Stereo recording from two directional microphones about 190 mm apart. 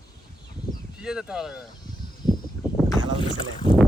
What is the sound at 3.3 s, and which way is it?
Speech, 25° left (ahead or behind).